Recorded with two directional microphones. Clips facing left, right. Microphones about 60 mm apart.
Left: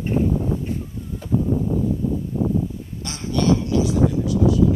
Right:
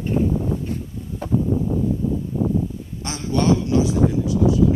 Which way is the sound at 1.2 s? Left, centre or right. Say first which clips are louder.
Right 1 dB; right.